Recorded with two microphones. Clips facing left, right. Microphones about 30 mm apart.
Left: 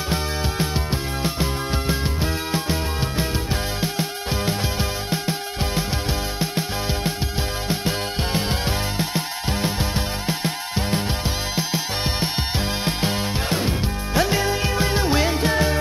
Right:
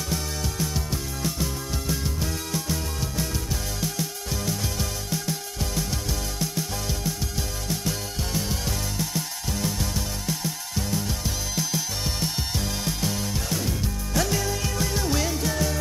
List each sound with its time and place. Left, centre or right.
0.1 s music: left